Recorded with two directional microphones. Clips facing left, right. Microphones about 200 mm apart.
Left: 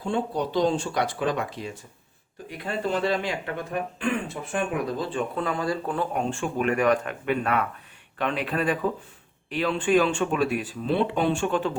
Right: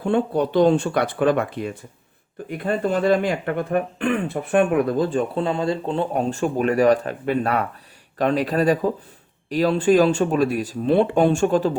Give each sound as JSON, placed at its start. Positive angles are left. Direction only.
{"t": 0.0, "sound": "speech", "side_deg": -60}
{"t": 6.3, "sound": "speech", "side_deg": -40}